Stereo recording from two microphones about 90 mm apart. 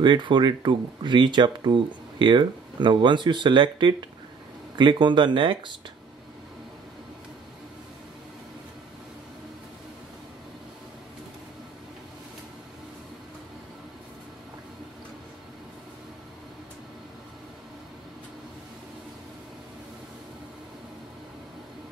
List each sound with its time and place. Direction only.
0.0 s speech: 60° right (ahead or behind)